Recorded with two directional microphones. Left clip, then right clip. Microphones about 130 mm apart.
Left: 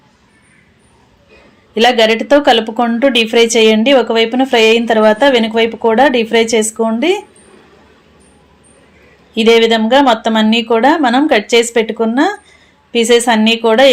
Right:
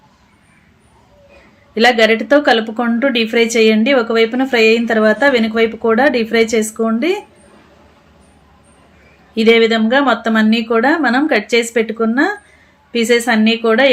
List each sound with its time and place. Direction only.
1.7 s speech: 20° left (ahead or behind)
9.3 s speech: 20° left (ahead or behind)